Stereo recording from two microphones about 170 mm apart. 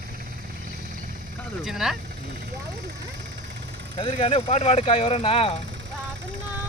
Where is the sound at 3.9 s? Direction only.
35° left (ahead or behind).